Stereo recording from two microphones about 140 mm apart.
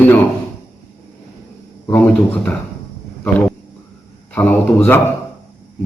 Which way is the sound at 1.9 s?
10° left (ahead or behind).